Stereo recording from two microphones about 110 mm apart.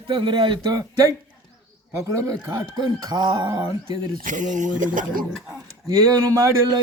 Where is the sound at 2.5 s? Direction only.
40° right (ahead or behind).